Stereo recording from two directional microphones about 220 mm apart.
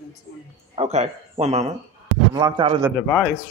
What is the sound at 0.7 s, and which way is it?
Speech, 30° right (ahead or behind).